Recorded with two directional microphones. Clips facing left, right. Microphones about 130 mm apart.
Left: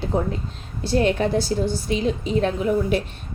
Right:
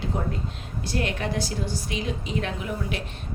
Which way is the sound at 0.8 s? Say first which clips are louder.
Left 9 dB; 30° left (ahead or behind).